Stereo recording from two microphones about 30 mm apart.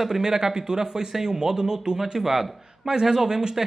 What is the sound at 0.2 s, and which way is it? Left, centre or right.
Speech, centre.